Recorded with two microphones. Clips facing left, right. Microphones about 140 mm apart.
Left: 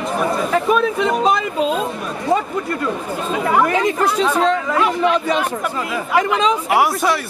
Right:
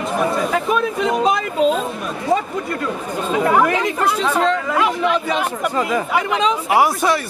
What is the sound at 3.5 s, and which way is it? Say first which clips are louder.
Speech: left 2 dB; centre (ahead or behind).